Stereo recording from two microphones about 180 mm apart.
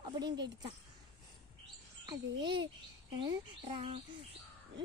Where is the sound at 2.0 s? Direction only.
25° right (ahead or behind).